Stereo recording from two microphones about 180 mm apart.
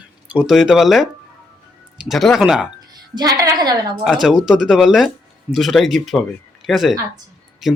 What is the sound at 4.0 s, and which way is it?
Speech, centre (ahead or behind).